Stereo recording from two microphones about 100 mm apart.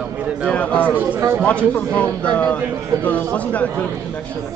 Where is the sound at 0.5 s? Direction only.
10° left (ahead or behind).